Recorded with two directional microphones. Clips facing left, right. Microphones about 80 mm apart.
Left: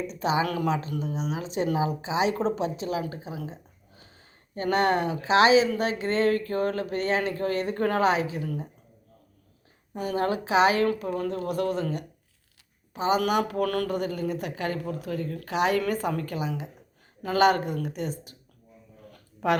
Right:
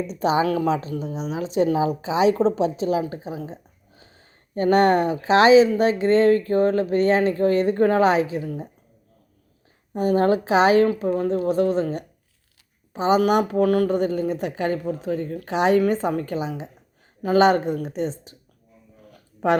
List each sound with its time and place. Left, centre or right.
0.1 s speech: right
1.5 s a woman's voice: left
2.4 s speech: right
3.1 s a sound: right
4.5 s speech: right
8.4 s speech: right
9.9 s speech: right
11.0 s speech: right
13.9 s speech: right